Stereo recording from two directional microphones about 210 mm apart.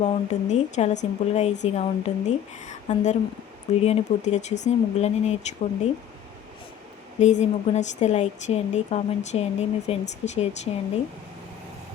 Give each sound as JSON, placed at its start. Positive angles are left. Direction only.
{"t": 0.0, "sound": "a woman's voice", "side_deg": 35}
{"t": 7.2, "sound": "a woman's voice", "side_deg": 35}